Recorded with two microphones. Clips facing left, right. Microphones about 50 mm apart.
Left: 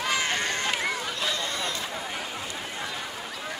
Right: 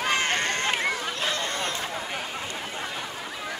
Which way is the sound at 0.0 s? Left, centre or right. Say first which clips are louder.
Right 2 dB; right.